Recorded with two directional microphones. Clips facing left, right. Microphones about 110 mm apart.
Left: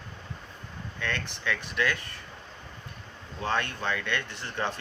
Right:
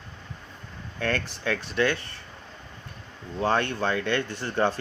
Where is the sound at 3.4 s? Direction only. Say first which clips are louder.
Right 5 dB; 35° right (ahead or behind).